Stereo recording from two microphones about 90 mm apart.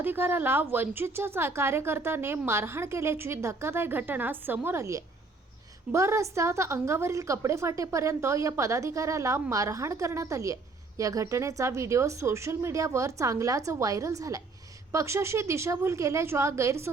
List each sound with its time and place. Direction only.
0.0 s a woman's voice: 25° right (ahead or behind)
4.8 s a woman's voice: 35° right (ahead or behind)